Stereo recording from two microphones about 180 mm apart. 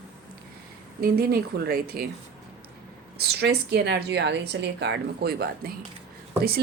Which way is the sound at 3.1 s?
65° right (ahead or behind).